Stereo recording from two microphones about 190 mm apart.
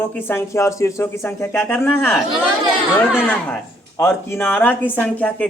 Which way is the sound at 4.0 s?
10° left (ahead or behind).